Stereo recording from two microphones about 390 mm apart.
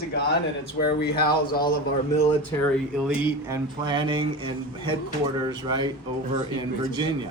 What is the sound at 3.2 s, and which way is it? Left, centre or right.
Speech, centre.